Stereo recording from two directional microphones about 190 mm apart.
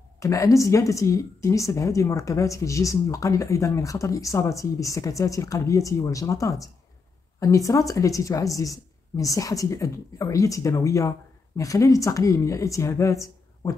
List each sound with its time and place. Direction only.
0.2 s speech: 15° left (ahead or behind)